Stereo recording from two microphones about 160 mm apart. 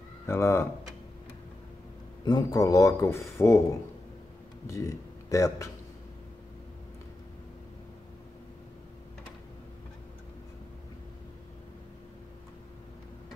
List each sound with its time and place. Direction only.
0.3 s speech: 15° left (ahead or behind)
2.2 s speech: 20° left (ahead or behind)
4.6 s speech: 20° left (ahead or behind)